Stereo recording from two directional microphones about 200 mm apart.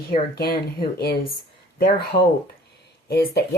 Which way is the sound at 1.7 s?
45° left (ahead or behind).